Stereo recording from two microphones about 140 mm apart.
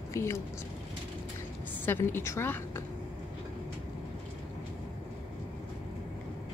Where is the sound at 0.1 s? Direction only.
20° left (ahead or behind).